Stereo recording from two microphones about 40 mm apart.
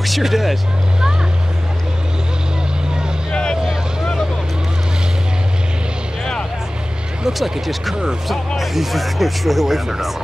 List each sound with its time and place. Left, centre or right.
0.0 s speech: centre
3.3 s vehicle: centre
7.2 s speech: centre